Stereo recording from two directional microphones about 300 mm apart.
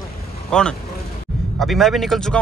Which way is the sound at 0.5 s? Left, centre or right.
Centre.